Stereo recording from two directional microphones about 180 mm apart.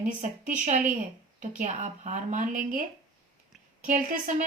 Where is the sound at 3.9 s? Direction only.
45° right (ahead or behind).